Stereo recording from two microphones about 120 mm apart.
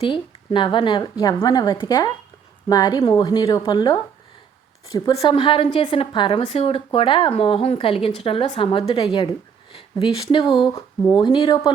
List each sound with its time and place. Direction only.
0.0 s a woman's voice: 45° left (ahead or behind)
5.1 s speech: 55° left (ahead or behind)
6.4 s a woman's voice: 55° left (ahead or behind); by 11.7 s 35° left (ahead or behind)